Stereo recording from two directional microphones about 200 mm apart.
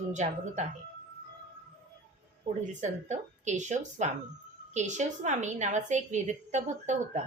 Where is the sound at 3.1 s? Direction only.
35° right (ahead or behind).